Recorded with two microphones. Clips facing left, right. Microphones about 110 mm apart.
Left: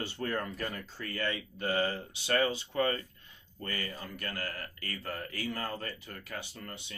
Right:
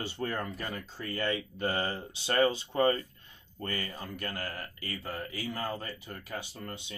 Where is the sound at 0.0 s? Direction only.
20° right (ahead or behind).